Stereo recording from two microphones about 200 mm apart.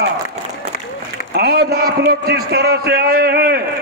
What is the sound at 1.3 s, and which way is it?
A man's voice, 50° right (ahead or behind).